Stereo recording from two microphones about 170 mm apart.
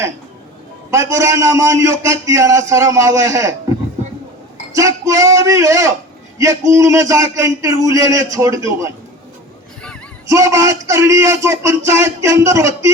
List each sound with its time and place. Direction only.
0.9 s a man's voice: 20° right (ahead or behind)
4.7 s a man's voice: 20° right (ahead or behind)
10.2 s a man's voice: 20° right (ahead or behind)